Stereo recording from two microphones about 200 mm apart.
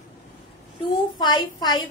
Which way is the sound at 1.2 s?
20° left (ahead or behind).